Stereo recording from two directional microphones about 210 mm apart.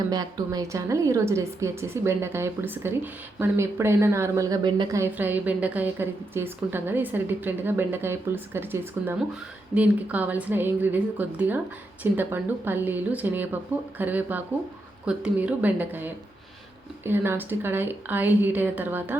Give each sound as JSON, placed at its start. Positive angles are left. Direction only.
{"t": 0.1, "sound": "a woman's voice", "side_deg": -20}